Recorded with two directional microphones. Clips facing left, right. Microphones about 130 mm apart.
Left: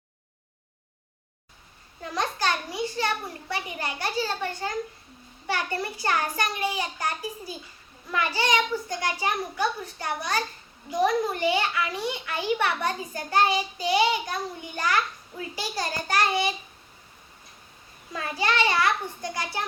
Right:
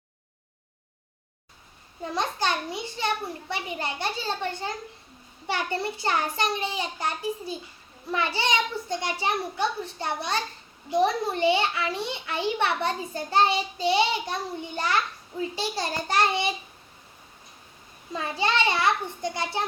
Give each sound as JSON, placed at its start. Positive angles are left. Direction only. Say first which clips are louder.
{"t": 2.0, "sound": "a child's voice", "louder": "right 1 dB", "side_deg": -20}
{"t": 5.5, "sound": "a child's voice", "louder": "right 1 dB", "side_deg": -25}
{"t": 18.1, "sound": "a child's voice", "louder": "right 1 dB", "side_deg": -25}